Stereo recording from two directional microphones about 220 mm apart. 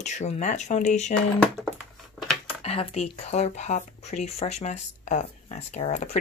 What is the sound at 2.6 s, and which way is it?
Speech, 30° left (ahead or behind).